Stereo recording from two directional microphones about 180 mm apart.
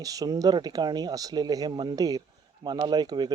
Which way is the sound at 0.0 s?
20° right (ahead or behind).